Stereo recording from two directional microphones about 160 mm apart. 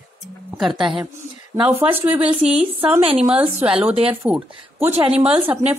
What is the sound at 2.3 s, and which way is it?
Speech, 35° right (ahead or behind).